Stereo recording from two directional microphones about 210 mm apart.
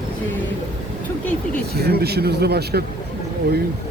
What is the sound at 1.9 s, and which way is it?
Speech, 50° right (ahead or behind).